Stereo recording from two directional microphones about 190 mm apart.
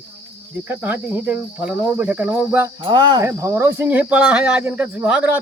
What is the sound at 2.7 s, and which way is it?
Speech, 25° right (ahead or behind).